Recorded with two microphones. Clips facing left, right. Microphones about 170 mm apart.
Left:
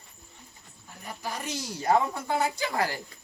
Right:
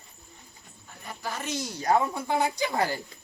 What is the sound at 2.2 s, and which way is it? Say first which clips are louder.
Speech: right 1 dB; 15° right (ahead or behind).